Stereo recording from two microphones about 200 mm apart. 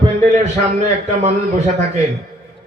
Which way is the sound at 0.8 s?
35° right (ahead or behind).